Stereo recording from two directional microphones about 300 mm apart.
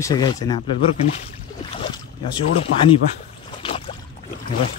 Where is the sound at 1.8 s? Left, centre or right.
Centre.